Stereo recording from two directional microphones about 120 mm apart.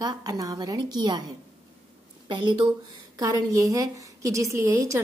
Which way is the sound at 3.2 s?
25° right (ahead or behind).